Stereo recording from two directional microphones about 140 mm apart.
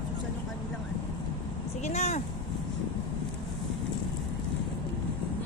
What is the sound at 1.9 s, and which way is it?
Speech, 50° left (ahead or behind).